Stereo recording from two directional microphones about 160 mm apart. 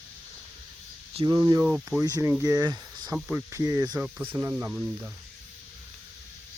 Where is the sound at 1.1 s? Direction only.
25° right (ahead or behind).